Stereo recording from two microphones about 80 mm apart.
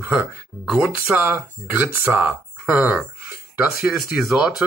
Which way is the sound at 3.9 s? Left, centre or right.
Centre.